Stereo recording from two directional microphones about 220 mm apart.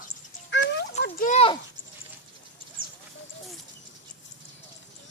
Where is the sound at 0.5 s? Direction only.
55° left (ahead or behind).